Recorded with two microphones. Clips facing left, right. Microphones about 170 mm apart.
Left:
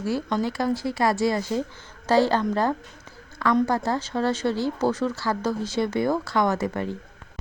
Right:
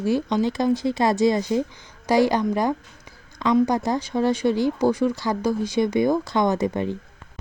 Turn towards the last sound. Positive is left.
turn(degrees=-20)  # may be behind; listen again after turning